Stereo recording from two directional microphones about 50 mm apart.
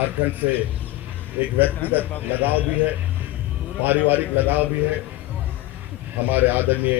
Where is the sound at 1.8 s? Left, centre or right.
Left.